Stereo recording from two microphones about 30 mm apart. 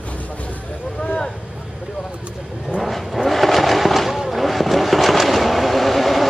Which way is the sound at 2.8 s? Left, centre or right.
Centre.